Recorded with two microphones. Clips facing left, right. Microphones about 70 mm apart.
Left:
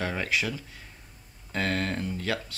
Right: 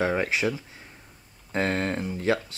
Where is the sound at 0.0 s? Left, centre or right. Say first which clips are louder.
Right 5 dB; right.